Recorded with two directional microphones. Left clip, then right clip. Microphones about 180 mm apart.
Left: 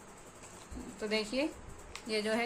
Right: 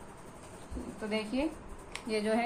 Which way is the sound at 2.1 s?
40° left (ahead or behind).